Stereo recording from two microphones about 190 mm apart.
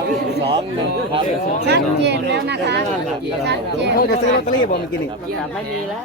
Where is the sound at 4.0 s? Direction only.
50° left (ahead or behind).